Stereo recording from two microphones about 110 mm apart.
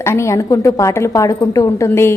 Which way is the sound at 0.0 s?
25° left (ahead or behind).